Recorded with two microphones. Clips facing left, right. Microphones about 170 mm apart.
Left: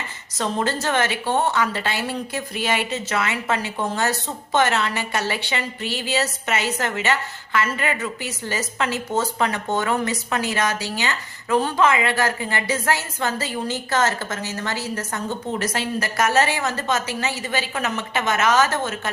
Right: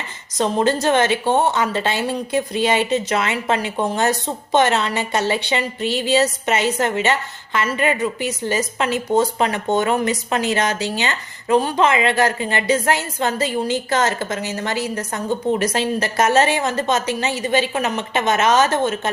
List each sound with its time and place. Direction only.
0.3 s a woman's voice: 20° right (ahead or behind)